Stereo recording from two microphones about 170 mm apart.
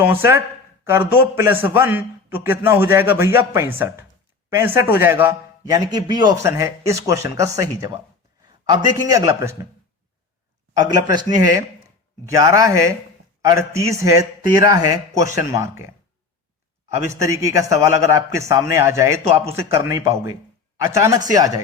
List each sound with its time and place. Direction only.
0.0 s a man's voice: 15° right (ahead or behind)
10.8 s a man's voice: 25° right (ahead or behind)
17.1 s a man's voice: 15° right (ahead or behind)